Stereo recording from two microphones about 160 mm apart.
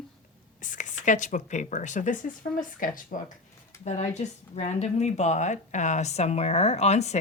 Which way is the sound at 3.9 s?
45° left (ahead or behind).